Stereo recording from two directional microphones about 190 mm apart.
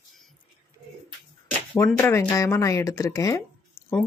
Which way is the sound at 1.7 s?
15° left (ahead or behind).